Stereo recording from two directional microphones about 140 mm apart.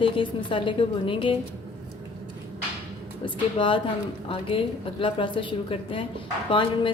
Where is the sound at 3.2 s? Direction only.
35° left (ahead or behind).